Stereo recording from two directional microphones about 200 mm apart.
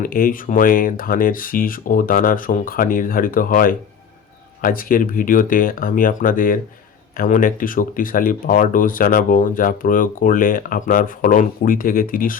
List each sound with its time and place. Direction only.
0.0 s speech: 45° left (ahead or behind)